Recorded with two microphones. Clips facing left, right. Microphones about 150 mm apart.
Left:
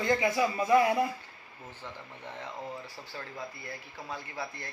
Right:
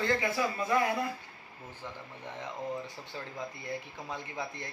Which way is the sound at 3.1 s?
20° right (ahead or behind).